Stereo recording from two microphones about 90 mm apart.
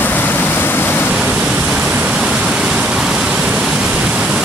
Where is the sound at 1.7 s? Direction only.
10° right (ahead or behind).